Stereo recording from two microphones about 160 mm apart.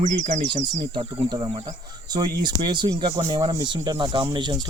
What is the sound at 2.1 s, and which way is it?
Speech, 25° right (ahead or behind).